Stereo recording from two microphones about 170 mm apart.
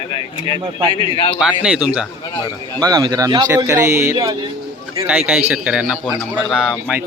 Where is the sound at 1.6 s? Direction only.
5° right (ahead or behind).